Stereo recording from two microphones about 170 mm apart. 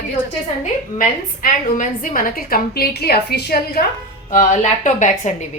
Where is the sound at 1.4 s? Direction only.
50° left (ahead or behind); by 3.8 s 70° left (ahead or behind).